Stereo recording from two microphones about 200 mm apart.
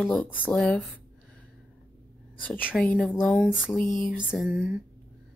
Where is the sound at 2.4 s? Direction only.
10° left (ahead or behind).